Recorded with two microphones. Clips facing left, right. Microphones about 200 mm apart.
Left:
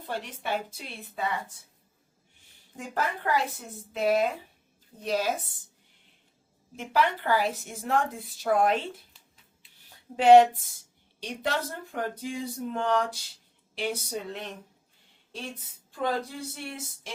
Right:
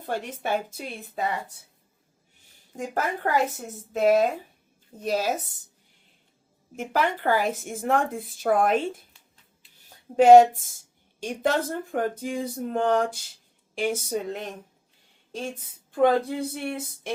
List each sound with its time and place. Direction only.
0.0 s a woman's voice: 50° right (ahead or behind)
2.7 s a woman's voice: 45° right (ahead or behind)
6.7 s a woman's voice: 50° right (ahead or behind)
10.2 s a woman's voice: 45° right (ahead or behind)